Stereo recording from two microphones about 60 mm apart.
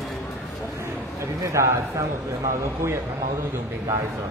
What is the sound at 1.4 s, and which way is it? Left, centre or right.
Speech, right.